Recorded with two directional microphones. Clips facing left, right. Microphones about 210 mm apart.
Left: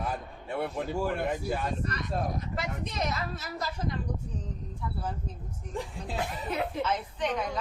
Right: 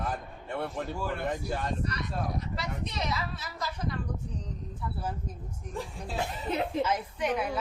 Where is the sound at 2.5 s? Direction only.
50° left (ahead or behind).